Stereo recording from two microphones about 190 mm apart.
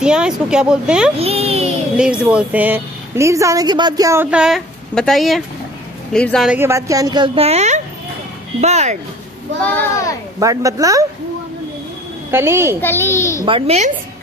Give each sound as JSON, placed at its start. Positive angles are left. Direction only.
{"t": 0.0, "sound": "speech", "side_deg": -5}
{"t": 1.1, "sound": "a sound", "side_deg": -30}
{"t": 2.0, "sound": "a woman's voice", "side_deg": -5}
{"t": 9.6, "sound": "a child's voice", "side_deg": 10}
{"t": 10.4, "sound": "a woman's voice", "side_deg": -15}
{"t": 12.3, "sound": "a woman's voice", "side_deg": -15}
{"t": 12.8, "sound": "a child's voice", "side_deg": 10}
{"t": 13.5, "sound": "a woman's voice", "side_deg": -30}